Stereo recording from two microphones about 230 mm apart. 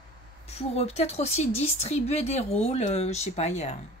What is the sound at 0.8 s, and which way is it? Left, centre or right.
A woman's voice, left.